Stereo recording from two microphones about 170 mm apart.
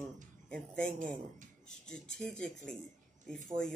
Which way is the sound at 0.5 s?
5° left (ahead or behind).